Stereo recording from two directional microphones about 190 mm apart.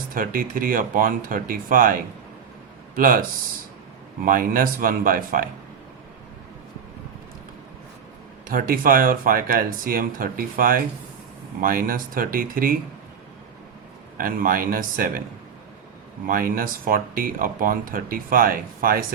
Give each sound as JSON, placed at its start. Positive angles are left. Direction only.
{"t": 0.1, "sound": "speech", "side_deg": -45}
{"t": 8.4, "sound": "speech", "side_deg": -50}
{"t": 14.2, "sound": "speech", "side_deg": -50}
{"t": 16.2, "sound": "speech", "side_deg": -45}